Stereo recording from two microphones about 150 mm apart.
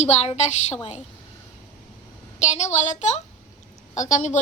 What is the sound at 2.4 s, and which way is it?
A woman's voice, 50° left (ahead or behind).